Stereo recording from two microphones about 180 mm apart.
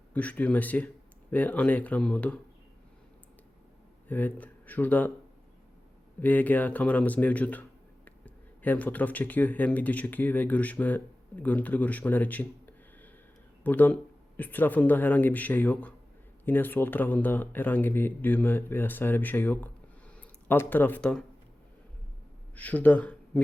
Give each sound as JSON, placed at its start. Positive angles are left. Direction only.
{"t": 0.1, "sound": "speech", "side_deg": 10}
{"t": 4.1, "sound": "speech", "side_deg": 10}
{"t": 6.1, "sound": "speech", "side_deg": 10}
{"t": 22.5, "sound": "speech", "side_deg": 10}